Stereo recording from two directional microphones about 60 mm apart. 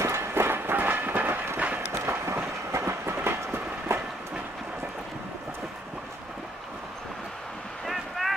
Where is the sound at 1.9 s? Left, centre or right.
Right.